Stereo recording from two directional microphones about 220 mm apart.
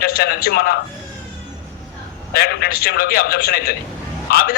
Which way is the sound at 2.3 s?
45° left (ahead or behind).